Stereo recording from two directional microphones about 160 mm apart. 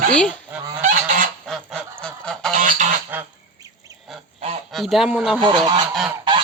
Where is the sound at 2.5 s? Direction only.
55° right (ahead or behind).